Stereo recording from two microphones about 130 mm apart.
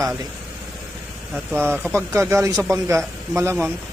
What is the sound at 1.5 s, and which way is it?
Speech, 15° right (ahead or behind).